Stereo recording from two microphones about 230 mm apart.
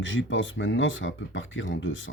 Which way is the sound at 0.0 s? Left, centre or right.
Left.